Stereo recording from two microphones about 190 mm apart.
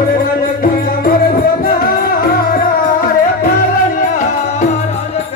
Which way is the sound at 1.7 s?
50° left (ahead or behind).